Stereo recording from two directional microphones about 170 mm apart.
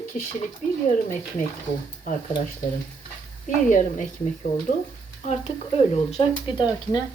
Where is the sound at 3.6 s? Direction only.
45° left (ahead or behind).